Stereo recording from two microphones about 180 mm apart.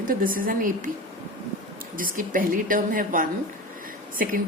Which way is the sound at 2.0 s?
50° right (ahead or behind).